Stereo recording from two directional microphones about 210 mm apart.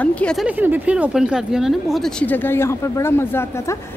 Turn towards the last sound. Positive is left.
turn(degrees=10)  # may be behind; listen again after turning